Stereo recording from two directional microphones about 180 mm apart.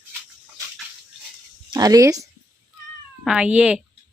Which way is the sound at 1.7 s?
20° right (ahead or behind).